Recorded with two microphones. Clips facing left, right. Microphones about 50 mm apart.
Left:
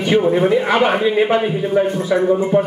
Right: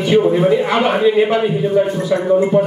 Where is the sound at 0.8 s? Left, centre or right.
Centre.